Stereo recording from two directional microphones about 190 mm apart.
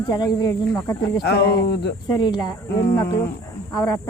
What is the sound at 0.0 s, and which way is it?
Speech, 20° left (ahead or behind).